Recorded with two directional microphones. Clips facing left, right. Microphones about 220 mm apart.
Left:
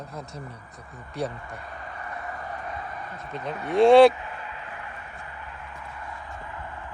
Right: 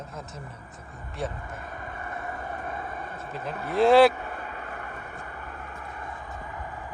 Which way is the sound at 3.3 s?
5° right (ahead or behind).